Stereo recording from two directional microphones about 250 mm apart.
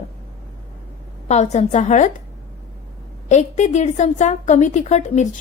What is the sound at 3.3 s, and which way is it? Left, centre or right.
A woman's voice, left.